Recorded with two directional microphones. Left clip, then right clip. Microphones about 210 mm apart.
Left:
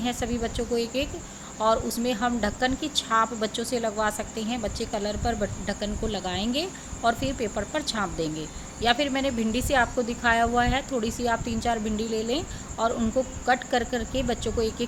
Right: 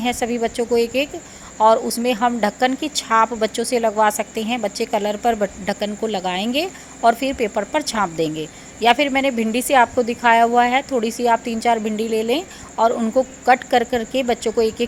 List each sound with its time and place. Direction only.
0.0 s speech: 25° right (ahead or behind)